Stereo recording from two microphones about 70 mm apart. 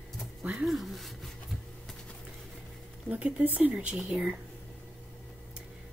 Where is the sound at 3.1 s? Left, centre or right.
Right.